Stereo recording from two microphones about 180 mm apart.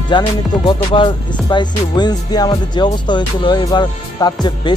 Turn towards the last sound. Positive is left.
turn(degrees=25)  # may be behind; listen again after turning